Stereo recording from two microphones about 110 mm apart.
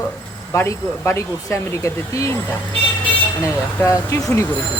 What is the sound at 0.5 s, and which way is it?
Speech, 25° left (ahead or behind).